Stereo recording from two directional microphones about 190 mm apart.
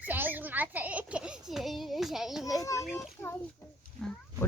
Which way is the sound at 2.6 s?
15° left (ahead or behind).